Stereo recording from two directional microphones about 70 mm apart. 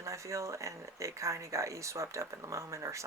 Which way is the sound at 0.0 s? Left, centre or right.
Right.